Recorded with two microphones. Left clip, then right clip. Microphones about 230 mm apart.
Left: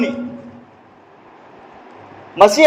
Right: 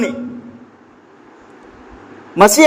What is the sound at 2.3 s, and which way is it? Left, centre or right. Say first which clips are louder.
Speech: right 1 dB; right.